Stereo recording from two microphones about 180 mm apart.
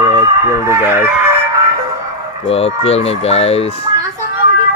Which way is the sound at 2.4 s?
35° left (ahead or behind).